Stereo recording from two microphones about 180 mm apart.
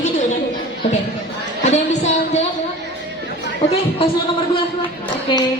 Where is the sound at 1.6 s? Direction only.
40° left (ahead or behind).